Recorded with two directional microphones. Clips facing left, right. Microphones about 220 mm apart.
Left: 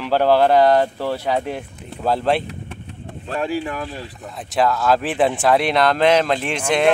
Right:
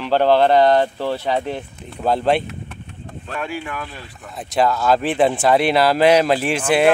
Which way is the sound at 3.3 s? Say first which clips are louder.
Left 4 dB; 35° left (ahead or behind).